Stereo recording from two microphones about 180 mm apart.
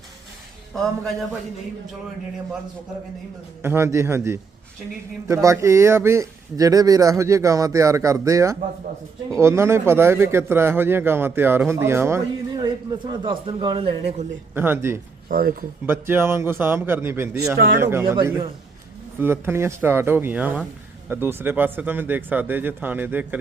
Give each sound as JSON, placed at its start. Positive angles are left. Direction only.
{"t": 3.6, "sound": "a man's voice", "side_deg": -15}
{"t": 14.5, "sound": "speech", "side_deg": -10}
{"t": 15.3, "sound": "speech", "side_deg": -55}
{"t": 15.9, "sound": "speech", "side_deg": -15}